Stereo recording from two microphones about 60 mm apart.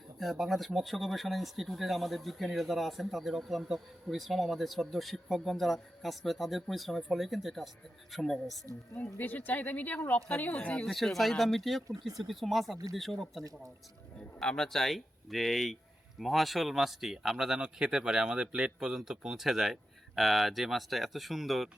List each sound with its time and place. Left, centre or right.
0.2 s speech: centre
9.1 s speech: left
10.8 s speech: centre